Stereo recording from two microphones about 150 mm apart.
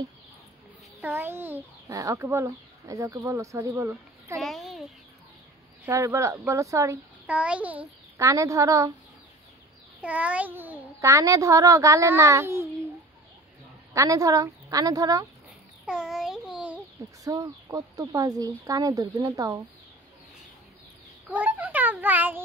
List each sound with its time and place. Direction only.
1.0 s a child's voice: 15° right (ahead or behind)
4.4 s babbling: centre (ahead or behind)
5.9 s a child's voice: 20° right (ahead or behind)
7.2 s a child's voice: 10° right (ahead or behind)
8.2 s a child's voice: 20° right (ahead or behind)
10.0 s a child's voice: 10° right (ahead or behind)
13.9 s a child's voice: 20° right (ahead or behind)
15.8 s a sound: 5° right (ahead or behind)
17.2 s a child's voice: 25° right (ahead or behind)
21.3 s a child's voice: 10° right (ahead or behind)